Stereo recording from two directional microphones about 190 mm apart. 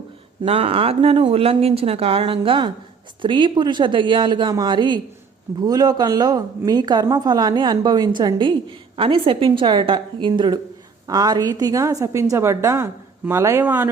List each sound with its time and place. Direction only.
0.4 s a woman's voice: 30° right (ahead or behind); by 13.9 s 10° right (ahead or behind)